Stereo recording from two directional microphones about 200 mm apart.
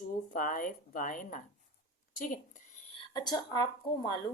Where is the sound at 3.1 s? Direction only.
20° left (ahead or behind).